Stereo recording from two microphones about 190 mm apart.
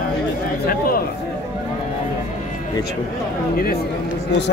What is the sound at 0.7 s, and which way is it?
Speech, 50° left (ahead or behind).